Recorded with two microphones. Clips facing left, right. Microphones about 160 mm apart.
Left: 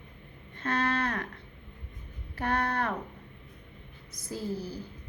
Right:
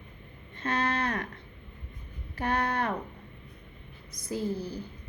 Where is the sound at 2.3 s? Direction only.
15° right (ahead or behind).